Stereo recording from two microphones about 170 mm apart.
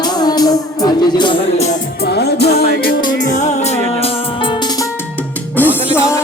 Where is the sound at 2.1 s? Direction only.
70° left (ahead or behind).